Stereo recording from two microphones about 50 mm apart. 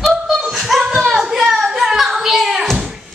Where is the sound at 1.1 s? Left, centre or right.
Centre.